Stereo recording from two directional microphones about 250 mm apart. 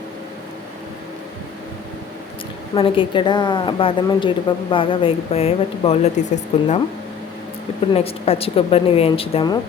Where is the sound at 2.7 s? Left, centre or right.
Left.